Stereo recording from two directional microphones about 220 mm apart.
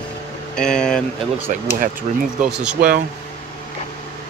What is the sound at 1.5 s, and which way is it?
Speech, 35° right (ahead or behind).